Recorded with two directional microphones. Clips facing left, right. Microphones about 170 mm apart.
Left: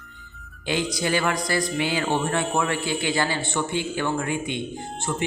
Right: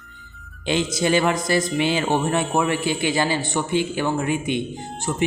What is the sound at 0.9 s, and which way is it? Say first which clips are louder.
Speech: right 7 dB; 20° right (ahead or behind).